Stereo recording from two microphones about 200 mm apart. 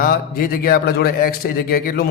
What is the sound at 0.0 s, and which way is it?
A man's voice, 45° left (ahead or behind).